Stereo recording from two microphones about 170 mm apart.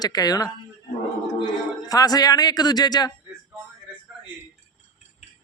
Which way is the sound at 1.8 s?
20° left (ahead or behind).